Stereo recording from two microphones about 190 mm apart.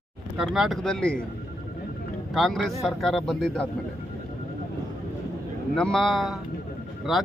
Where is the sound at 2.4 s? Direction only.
Centre (ahead or behind).